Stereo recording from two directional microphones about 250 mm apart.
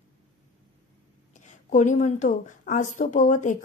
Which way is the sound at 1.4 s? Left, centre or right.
Left.